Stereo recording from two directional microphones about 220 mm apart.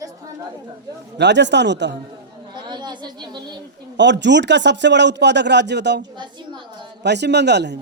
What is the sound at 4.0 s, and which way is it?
A man's voice, 55° right (ahead or behind).